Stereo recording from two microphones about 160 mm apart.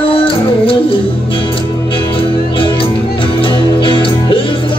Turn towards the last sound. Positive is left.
turn(degrees=35)  # may be behind; listen again after turning